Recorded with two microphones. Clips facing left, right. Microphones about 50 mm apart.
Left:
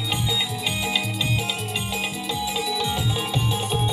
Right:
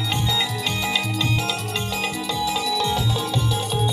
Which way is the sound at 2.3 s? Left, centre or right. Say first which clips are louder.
Right 3 dB; centre.